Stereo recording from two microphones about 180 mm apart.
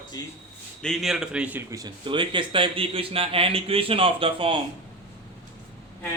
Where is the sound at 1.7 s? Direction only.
20° right (ahead or behind).